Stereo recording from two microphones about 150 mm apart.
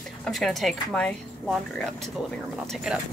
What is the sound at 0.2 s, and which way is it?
Speech, centre (ahead or behind).